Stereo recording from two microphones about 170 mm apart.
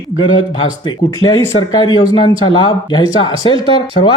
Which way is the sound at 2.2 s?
30° left (ahead or behind).